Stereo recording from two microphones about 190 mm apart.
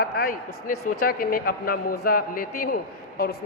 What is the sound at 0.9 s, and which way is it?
A man's voice, 50° left (ahead or behind).